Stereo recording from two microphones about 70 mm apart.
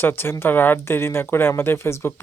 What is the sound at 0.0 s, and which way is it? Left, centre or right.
Speech, left.